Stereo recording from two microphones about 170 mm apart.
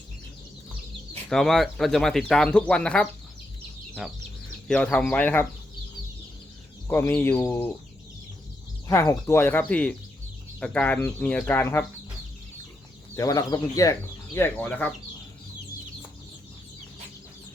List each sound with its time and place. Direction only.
1.3 s speech: centre (ahead or behind)
6.8 s speech: 15° left (ahead or behind)
8.9 s speech: 15° left (ahead or behind)
13.1 s speech: 20° left (ahead or behind)